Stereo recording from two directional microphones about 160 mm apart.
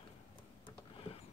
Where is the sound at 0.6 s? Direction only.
35° left (ahead or behind).